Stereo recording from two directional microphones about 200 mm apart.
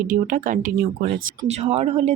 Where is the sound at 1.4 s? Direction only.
30° right (ahead or behind).